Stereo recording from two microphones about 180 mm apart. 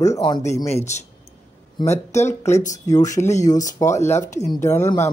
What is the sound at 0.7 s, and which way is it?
Speech, 40° left (ahead or behind).